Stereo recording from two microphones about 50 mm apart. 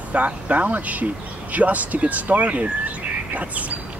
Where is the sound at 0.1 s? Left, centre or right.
Right.